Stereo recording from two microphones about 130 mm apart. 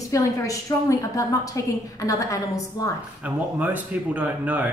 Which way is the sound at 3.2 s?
10° right (ahead or behind).